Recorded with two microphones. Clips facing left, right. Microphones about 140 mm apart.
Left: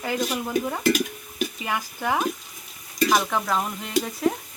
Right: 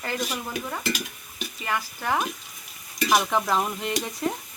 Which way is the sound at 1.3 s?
10° left (ahead or behind).